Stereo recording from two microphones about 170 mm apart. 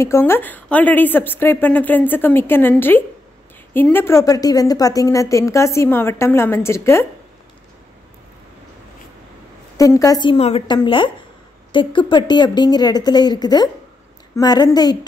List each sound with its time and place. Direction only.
0.0 s speech: 15° left (ahead or behind)
9.8 s speech: 20° left (ahead or behind)